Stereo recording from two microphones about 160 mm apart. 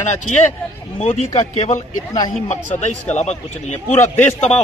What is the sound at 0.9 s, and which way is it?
A man's voice, 40° left (ahead or behind).